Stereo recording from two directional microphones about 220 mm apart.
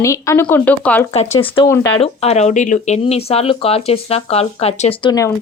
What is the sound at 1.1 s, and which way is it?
Speech, 30° left (ahead or behind).